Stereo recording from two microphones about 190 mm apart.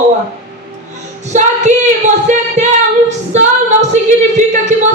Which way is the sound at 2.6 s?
35° right (ahead or behind).